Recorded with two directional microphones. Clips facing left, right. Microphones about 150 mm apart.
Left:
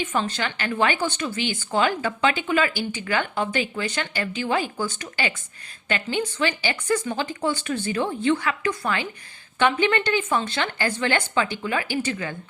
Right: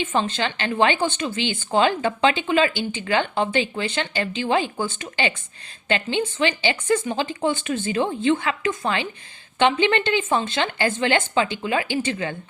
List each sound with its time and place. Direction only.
0.0 s a woman's voice: 25° right (ahead or behind)